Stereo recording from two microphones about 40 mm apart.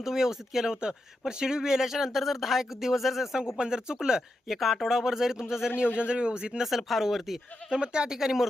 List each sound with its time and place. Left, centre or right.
0.0 s speech: centre
3.6 s a man's voice: centre
4.4 s speech: centre
6.0 s a man's voice: right
6.6 s speech: centre
7.7 s speech: right